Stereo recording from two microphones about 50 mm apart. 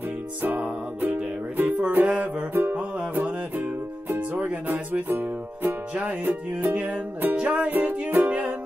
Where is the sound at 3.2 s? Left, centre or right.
Right.